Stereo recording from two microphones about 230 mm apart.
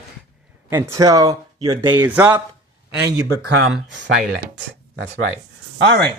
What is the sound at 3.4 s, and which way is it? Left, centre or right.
Speech, right.